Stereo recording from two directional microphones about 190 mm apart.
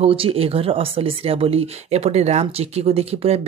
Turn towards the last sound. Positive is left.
turn(degrees=-35)  # may be behind; listen again after turning